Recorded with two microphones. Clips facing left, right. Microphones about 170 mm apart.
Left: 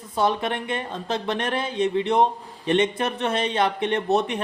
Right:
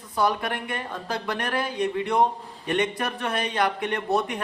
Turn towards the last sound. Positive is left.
turn(degrees=25)  # may be behind; listen again after turning